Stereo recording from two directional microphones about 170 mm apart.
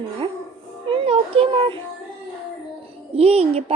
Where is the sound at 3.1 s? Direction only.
35° right (ahead or behind).